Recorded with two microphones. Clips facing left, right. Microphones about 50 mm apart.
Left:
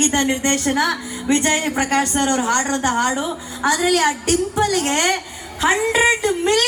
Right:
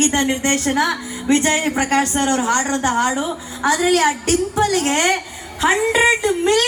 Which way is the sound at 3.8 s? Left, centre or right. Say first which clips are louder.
Right 2 dB; right.